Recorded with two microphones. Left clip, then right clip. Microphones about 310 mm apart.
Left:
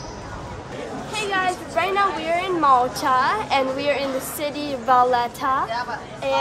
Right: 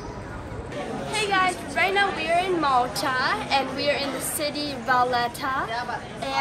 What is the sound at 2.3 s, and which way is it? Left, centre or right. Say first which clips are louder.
A woman's voice: left 4 dB; centre.